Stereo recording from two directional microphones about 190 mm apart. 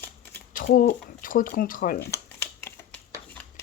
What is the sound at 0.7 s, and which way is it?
Speech, 45° left (ahead or behind).